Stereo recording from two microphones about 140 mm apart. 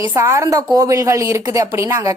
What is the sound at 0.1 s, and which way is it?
Speech, 20° right (ahead or behind).